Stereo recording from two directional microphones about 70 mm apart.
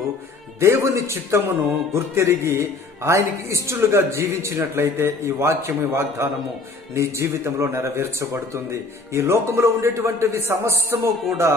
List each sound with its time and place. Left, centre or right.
0.6 s speech: right